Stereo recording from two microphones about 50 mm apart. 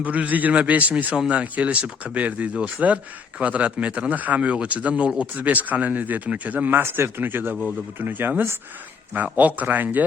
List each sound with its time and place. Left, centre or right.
0.0 s speech: right
7.2 s speech: right